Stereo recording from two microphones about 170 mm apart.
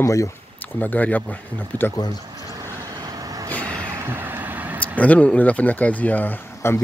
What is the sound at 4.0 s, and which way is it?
Vehicle, 15° right (ahead or behind).